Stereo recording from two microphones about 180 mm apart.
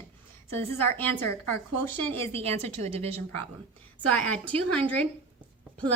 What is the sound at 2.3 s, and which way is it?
Speech, 35° right (ahead or behind).